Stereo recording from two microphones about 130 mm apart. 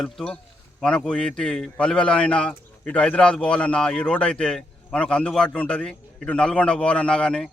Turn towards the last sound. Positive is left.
turn(degrees=5)  # may be behind; listen again after turning